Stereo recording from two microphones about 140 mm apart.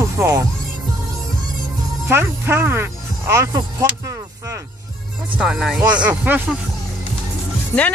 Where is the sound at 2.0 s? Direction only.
15° right (ahead or behind).